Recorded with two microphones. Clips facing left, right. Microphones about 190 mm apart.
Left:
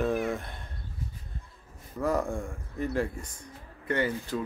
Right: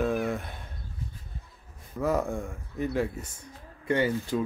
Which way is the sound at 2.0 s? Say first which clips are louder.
Right 1 dB; centre (ahead or behind).